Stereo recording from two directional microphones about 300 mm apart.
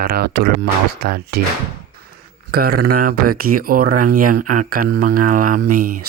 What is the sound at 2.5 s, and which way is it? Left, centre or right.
Speech, right.